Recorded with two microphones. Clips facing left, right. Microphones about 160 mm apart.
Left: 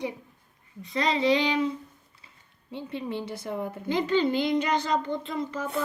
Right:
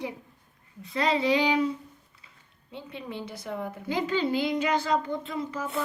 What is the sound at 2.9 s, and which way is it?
Speech, 30° left (ahead or behind).